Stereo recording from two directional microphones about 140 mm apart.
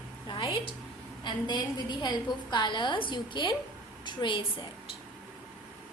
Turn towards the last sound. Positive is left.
turn(degrees=35)  # may be behind; listen again after turning